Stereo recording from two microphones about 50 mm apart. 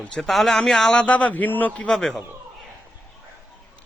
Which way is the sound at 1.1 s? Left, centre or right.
Left.